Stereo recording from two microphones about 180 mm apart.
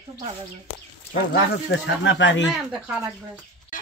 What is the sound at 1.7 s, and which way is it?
Speech, 85° left.